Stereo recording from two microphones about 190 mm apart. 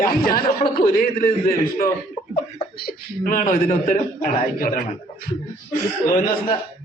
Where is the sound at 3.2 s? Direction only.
45° left (ahead or behind).